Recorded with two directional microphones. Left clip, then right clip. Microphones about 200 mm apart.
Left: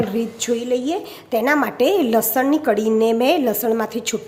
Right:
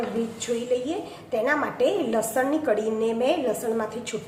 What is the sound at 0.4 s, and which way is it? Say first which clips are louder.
A woman's voice: left 5 dB; 55° left (ahead or behind).